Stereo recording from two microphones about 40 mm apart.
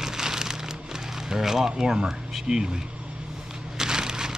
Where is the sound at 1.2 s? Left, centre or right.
Centre.